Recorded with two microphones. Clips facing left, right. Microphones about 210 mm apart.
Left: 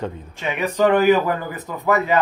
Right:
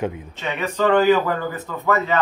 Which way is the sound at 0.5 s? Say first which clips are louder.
Left 1 dB; 15° left (ahead or behind).